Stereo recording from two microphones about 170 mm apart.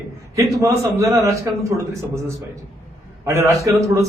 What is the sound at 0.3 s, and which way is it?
A man's voice, 20° right (ahead or behind).